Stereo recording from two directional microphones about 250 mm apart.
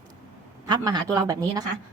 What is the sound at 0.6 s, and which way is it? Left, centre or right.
A woman's voice, centre.